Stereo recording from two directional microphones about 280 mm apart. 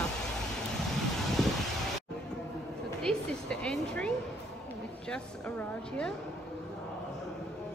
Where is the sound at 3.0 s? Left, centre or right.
Centre.